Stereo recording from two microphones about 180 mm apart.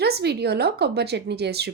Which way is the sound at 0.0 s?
65° right (ahead or behind).